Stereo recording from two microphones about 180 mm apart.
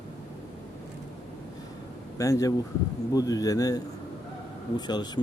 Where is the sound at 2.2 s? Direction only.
20° left (ahead or behind).